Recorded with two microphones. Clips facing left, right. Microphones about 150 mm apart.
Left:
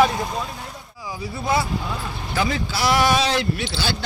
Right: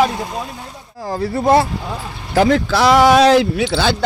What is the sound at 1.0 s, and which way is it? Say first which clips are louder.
Speech: right 11 dB; 70° right (ahead or behind).